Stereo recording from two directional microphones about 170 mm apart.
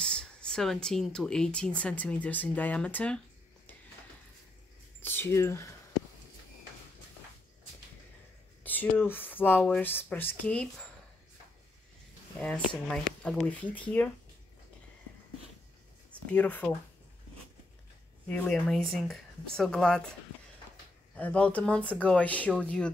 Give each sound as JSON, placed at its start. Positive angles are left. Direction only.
{"t": 0.0, "sound": "speech", "side_deg": 5}
{"t": 5.0, "sound": "speech", "side_deg": 15}
{"t": 8.6, "sound": "speech", "side_deg": 10}
{"t": 12.4, "sound": "speech", "side_deg": 5}
{"t": 16.3, "sound": "speech", "side_deg": 10}
{"t": 18.3, "sound": "speech", "side_deg": 5}
{"t": 21.1, "sound": "speech", "side_deg": 10}